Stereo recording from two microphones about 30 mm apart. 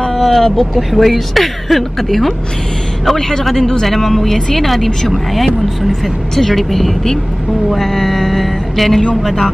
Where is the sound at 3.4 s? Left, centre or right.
Centre.